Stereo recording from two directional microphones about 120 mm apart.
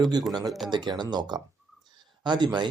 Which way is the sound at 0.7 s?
35° right (ahead or behind).